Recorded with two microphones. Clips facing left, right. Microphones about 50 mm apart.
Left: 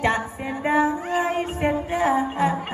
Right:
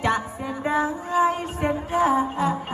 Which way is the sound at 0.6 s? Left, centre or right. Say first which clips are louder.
Left 3 dB; left.